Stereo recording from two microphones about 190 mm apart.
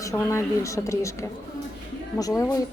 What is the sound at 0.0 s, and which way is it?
A woman's voice, 15° left (ahead or behind).